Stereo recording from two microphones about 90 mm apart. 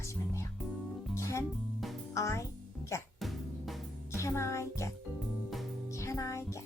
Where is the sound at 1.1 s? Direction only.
35° left (ahead or behind).